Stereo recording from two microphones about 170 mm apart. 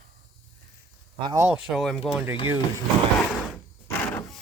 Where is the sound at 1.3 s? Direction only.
15° right (ahead or behind).